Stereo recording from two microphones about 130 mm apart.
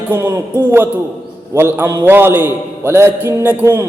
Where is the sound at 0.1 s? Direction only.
20° right (ahead or behind).